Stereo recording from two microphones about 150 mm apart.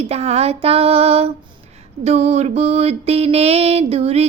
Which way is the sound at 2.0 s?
45° right (ahead or behind).